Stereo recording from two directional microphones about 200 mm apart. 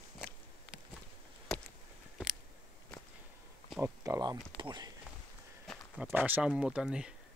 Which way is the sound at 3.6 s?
10° right (ahead or behind).